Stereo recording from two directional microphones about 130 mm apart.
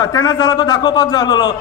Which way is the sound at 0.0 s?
30° left (ahead or behind).